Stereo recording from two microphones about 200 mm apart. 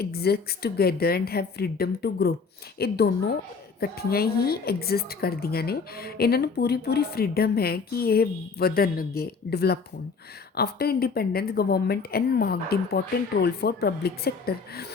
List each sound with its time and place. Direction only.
0.0 s a woman's voice: 50° left (ahead or behind)